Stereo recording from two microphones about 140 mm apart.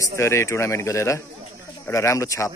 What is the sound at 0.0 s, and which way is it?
Speech, 20° left (ahead or behind).